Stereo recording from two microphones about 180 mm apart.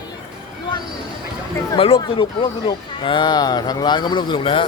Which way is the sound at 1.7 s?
30° left (ahead or behind).